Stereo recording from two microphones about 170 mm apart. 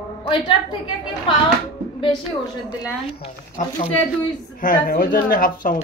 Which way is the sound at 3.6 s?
50° left (ahead or behind).